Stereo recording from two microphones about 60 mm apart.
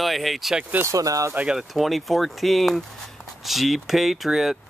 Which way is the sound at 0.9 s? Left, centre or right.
Right.